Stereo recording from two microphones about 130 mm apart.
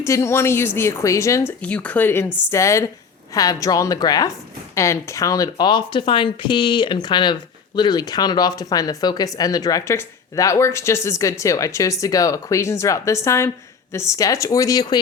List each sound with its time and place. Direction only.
0.0 s speech: 20° left (ahead or behind)
1.6 s speech: 10° left (ahead or behind); by 15.0 s 30° left (ahead or behind)